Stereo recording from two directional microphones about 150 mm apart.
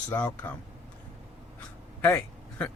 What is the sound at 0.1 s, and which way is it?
Speech, 20° left (ahead or behind).